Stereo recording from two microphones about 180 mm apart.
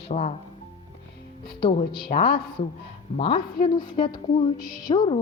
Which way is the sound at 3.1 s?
30° left (ahead or behind).